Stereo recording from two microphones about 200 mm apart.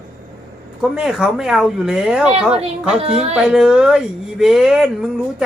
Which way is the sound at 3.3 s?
5° right (ahead or behind).